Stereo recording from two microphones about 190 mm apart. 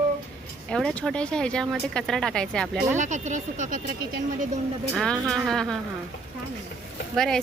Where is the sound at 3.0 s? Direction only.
40° right (ahead or behind).